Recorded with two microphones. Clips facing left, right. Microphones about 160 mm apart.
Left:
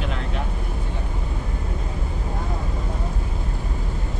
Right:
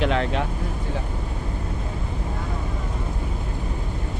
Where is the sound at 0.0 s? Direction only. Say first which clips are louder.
Right 8 dB; 90° right.